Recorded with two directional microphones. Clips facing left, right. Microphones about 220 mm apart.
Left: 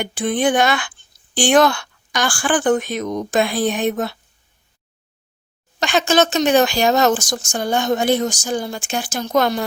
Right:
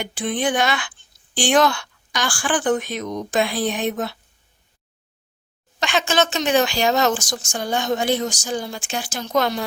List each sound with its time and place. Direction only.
0.0 s speech: 50° left (ahead or behind)
5.8 s speech: 40° left (ahead or behind)